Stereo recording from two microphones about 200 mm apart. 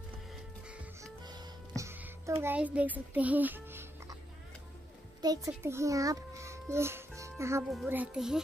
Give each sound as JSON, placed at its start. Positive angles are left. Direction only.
{"t": 1.2, "sound": "music", "side_deg": -20}
{"t": 5.2, "sound": "a child's voice", "side_deg": -20}
{"t": 7.2, "sound": "music", "side_deg": -15}
{"t": 7.6, "sound": "a child's voice", "side_deg": 0}